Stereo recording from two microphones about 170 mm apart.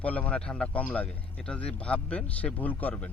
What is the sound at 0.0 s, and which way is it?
Speech, 10° left (ahead or behind).